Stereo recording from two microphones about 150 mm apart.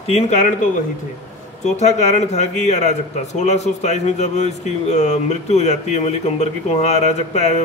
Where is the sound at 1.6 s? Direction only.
50° left (ahead or behind).